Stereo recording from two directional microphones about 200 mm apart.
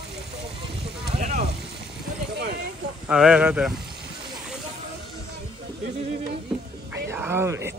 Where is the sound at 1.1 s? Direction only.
35° right (ahead or behind).